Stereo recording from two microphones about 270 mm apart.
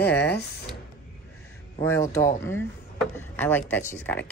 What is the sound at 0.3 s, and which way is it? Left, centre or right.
Speech, left.